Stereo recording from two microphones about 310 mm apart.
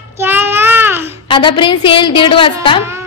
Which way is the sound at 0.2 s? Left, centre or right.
Centre.